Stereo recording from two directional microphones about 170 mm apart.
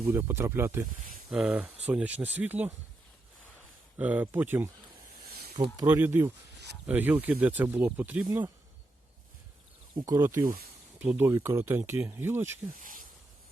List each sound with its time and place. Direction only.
0.0 s speech: 15° right (ahead or behind)
3.9 s speech: 10° right (ahead or behind)
5.7 s speech: 15° right (ahead or behind)
9.9 s speech: 15° right (ahead or behind)
12.8 s insect: 55° right (ahead or behind)